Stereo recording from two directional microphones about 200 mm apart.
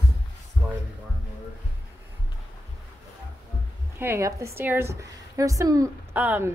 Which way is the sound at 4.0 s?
15° right (ahead or behind).